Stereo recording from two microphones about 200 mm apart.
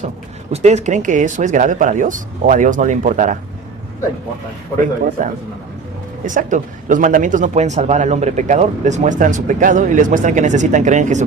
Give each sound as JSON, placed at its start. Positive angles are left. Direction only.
{"t": 0.5, "sound": "speech", "side_deg": -35}
{"t": 5.2, "sound": "speech", "side_deg": -40}